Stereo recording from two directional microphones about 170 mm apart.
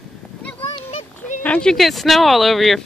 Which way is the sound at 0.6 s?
35° left (ahead or behind).